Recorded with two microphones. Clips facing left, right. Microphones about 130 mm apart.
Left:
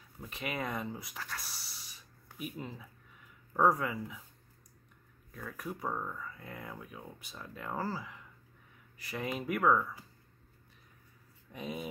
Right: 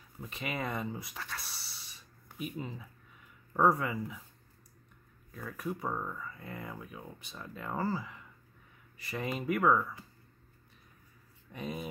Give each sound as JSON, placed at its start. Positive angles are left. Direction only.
{"t": 0.2, "sound": "speech", "side_deg": 0}
{"t": 5.3, "sound": "speech", "side_deg": 0}
{"t": 11.5, "sound": "speech", "side_deg": 0}